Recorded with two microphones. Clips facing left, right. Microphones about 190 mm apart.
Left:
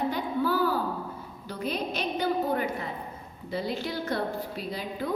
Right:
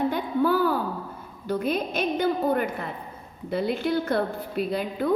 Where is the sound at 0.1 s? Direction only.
55° right (ahead or behind).